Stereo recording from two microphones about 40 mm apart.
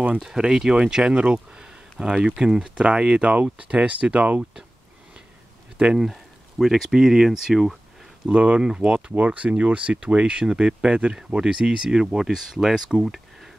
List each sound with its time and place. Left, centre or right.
0.4 s speech: centre; by 4.4 s right
6.6 s speech: centre
8.3 s speech: right
9.1 s speech: right; by 13.5 s centre